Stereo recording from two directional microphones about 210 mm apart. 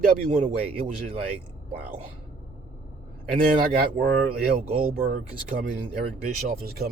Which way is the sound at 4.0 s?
45° right (ahead or behind).